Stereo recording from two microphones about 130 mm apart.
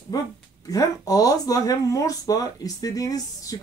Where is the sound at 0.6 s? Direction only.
25° left (ahead or behind).